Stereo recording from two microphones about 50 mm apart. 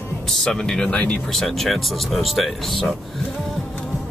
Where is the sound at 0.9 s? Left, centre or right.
Left.